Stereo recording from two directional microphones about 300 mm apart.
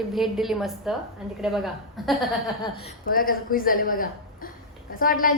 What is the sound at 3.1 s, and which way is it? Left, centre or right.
A woman's voice, left.